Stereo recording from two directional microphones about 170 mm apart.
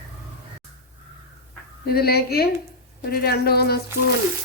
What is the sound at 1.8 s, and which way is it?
Speech, 65° left (ahead or behind).